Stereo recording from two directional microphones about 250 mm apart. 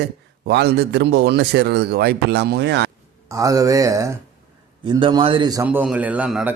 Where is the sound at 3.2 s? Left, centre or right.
Centre.